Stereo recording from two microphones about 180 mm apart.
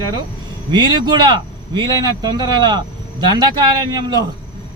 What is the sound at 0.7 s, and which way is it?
Speech, 25° right (ahead or behind).